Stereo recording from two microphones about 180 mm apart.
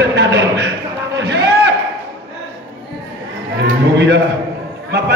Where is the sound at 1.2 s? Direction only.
75° right (ahead or behind).